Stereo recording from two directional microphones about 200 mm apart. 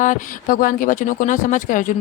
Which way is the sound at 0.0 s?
40° left (ahead or behind).